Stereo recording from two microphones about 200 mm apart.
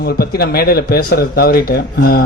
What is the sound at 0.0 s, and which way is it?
Speech, 50° left (ahead or behind).